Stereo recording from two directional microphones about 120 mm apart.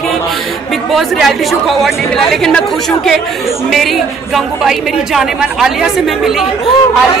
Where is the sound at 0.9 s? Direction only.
Centre (ahead or behind).